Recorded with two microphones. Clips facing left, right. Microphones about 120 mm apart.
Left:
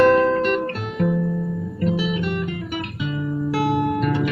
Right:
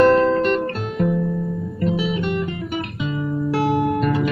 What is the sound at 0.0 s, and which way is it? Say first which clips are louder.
Guitar: right 1 dB; 30° right (ahead or behind).